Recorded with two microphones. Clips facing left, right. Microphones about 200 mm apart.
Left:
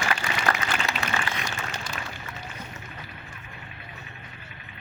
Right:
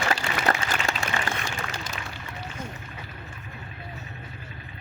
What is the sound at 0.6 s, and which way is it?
Applause, 30° right (ahead or behind).